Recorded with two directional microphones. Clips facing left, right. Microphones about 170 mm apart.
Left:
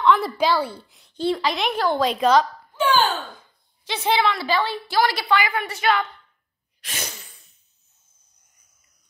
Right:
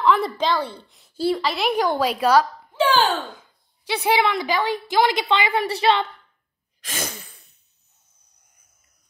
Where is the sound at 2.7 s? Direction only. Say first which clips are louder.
Right 1 dB; 30° right (ahead or behind).